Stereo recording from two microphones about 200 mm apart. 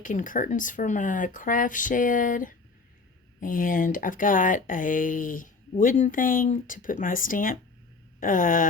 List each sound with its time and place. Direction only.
0.0 s speech: 40° left (ahead or behind)